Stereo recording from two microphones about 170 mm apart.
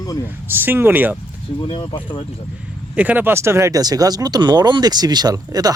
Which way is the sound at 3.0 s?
10° right (ahead or behind).